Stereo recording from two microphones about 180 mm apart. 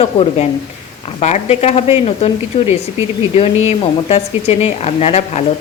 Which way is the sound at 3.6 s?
35° left (ahead or behind).